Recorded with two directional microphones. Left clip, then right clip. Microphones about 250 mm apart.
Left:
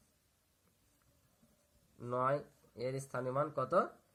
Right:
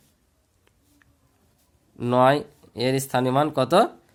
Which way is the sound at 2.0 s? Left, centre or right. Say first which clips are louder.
Right 17 dB; right.